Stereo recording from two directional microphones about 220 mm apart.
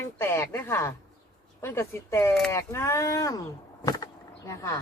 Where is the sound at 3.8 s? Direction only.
15° left (ahead or behind).